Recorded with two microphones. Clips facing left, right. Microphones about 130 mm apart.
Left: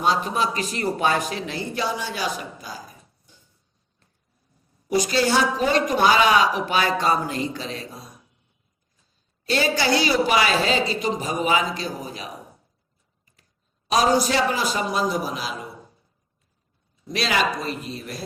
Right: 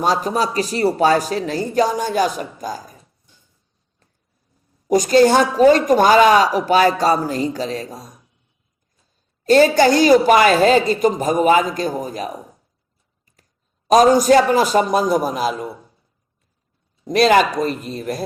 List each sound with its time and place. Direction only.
0.0 s speech: 40° right (ahead or behind)
4.9 s a woman's voice: 45° right (ahead or behind)
9.4 s a woman's voice: 45° right (ahead or behind)
13.8 s a woman's voice: 45° right (ahead or behind)
17.1 s a woman's voice: 50° right (ahead or behind)